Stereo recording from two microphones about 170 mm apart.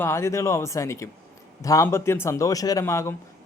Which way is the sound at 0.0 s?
15° left (ahead or behind).